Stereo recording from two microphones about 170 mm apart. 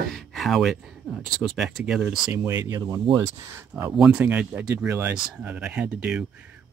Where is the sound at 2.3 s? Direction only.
15° right (ahead or behind).